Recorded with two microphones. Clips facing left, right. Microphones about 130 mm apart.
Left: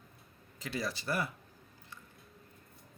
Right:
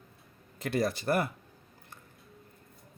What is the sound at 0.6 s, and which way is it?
Speech, 55° right (ahead or behind).